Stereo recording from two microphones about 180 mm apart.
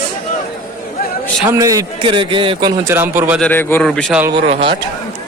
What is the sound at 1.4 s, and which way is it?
A man's voice, 20° right (ahead or behind).